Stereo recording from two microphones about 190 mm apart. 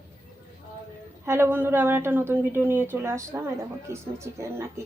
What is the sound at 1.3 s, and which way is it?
A woman's voice, 10° right (ahead or behind).